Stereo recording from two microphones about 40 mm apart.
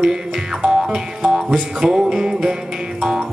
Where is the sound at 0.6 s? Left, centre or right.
Right.